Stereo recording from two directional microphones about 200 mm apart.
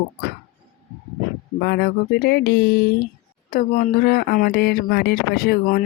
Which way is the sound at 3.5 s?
45° left (ahead or behind).